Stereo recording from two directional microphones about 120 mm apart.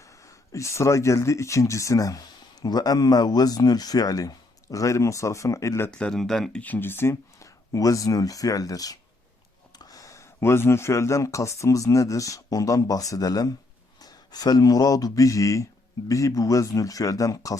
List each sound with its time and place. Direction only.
0.0 s speech: 25° left (ahead or behind)
5.9 s speech: 5° left (ahead or behind); by 17.6 s 30° left (ahead or behind)